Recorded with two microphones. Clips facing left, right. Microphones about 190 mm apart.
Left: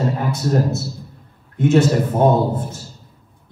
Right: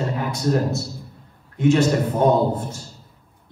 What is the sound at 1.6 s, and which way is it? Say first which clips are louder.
A man's voice: left 2 dB; 55° left (ahead or behind).